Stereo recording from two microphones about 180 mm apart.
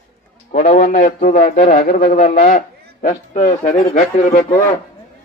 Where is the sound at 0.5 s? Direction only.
45° left (ahead or behind).